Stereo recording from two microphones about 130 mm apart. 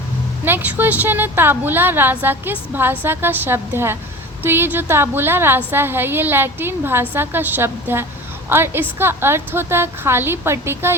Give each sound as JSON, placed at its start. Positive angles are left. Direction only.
{"t": 0.4, "sound": "a woman's voice", "side_deg": -15}